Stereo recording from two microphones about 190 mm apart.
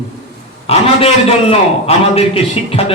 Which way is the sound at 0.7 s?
30° left (ahead or behind).